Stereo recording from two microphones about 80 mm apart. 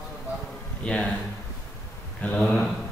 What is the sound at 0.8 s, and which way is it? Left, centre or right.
Speech, centre.